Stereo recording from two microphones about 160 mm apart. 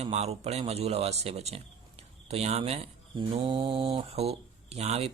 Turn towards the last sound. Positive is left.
turn(degrees=-40)  # may be behind; listen again after turning